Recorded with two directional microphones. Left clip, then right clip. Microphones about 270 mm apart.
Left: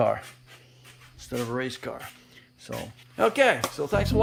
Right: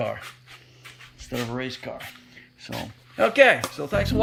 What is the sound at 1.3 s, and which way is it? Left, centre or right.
Speech, centre.